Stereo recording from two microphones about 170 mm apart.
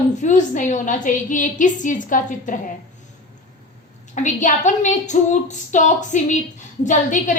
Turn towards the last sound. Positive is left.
turn(degrees=45)  # may be behind; listen again after turning